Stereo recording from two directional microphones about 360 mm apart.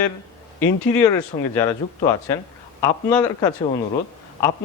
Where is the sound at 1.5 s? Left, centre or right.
Centre.